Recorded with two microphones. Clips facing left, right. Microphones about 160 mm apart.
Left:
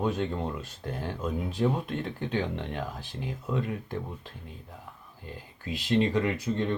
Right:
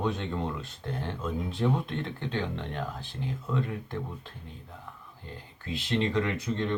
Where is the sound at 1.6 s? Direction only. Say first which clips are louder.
Left 1 dB; 10° left (ahead or behind).